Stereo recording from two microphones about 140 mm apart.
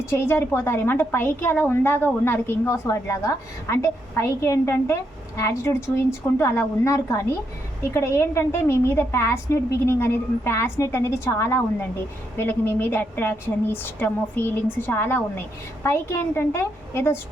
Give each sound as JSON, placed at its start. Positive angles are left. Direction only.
{"t": 0.0, "sound": "a woman's voice", "side_deg": 20}